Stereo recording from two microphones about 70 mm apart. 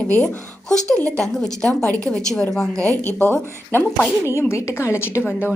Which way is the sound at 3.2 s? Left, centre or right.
Left.